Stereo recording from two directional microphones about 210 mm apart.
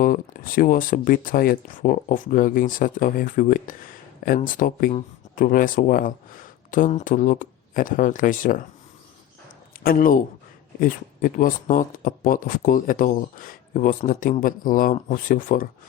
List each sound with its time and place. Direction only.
0.0 s speech: 40° left (ahead or behind)
9.8 s speech: 40° left (ahead or behind)